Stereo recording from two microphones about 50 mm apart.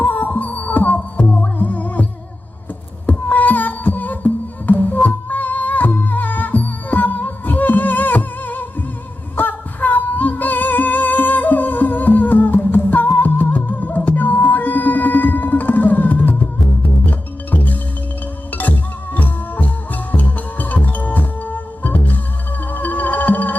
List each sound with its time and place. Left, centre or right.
0.0 s music: left
3.1 s music: left